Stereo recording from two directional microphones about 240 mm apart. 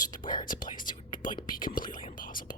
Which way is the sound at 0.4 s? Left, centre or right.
Left.